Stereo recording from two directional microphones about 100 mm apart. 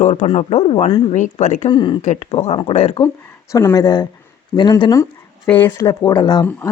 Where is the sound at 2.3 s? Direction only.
75° left (ahead or behind).